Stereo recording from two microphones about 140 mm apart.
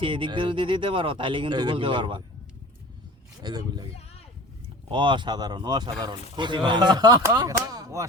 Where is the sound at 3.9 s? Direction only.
45° left (ahead or behind).